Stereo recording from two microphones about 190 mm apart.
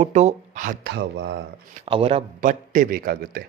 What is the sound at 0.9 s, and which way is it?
Speech, 70° right (ahead or behind).